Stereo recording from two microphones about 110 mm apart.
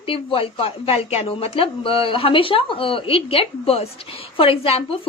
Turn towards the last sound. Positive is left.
turn(degrees=60)  # may be behind; listen again after turning